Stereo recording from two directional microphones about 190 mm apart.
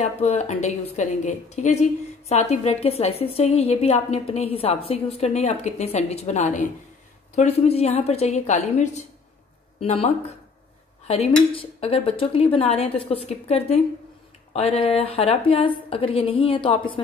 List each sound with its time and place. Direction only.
0.0 s a woman's voice: 35° left (ahead or behind)